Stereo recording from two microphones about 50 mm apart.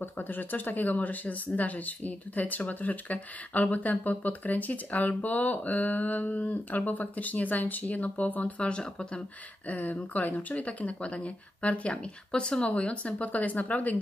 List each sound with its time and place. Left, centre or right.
0.0 s speech: left
9.7 s speech: left